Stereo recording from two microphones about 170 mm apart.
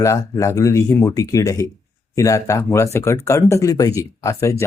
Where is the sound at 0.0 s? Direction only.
15° left (ahead or behind).